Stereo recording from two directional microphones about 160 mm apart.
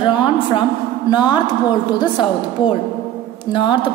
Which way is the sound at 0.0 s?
30° left (ahead or behind).